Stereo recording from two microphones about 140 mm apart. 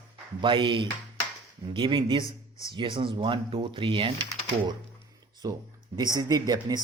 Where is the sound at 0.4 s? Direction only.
35° right (ahead or behind).